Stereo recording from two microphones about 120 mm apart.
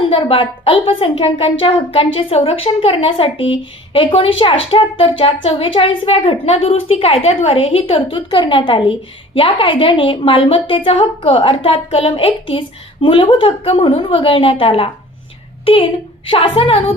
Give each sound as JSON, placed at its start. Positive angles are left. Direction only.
{"t": 0.1, "sound": "a woman's voice", "side_deg": 50}